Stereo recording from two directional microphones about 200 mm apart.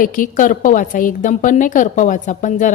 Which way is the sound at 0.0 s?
40° left (ahead or behind).